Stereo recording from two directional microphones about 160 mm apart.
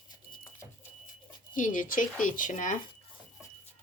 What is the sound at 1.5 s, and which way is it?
Speech, 55° left (ahead or behind).